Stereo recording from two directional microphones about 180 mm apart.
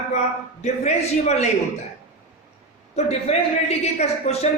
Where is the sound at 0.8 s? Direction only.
35° left (ahead or behind).